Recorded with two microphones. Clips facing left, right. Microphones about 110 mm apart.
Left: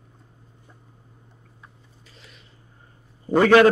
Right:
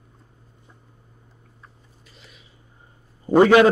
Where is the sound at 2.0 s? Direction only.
5° right (ahead or behind).